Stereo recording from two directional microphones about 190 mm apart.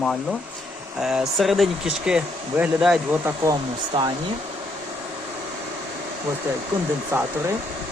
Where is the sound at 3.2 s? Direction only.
20° right (ahead or behind).